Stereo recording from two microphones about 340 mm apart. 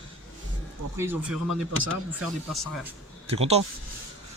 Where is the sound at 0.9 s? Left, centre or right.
Centre.